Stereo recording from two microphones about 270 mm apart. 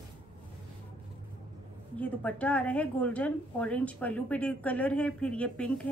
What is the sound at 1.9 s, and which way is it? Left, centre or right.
A woman's voice, centre.